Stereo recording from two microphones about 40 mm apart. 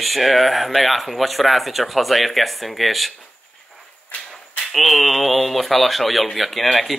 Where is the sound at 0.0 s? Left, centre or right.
Centre.